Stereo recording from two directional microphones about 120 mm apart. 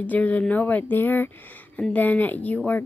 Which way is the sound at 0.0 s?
15° left (ahead or behind).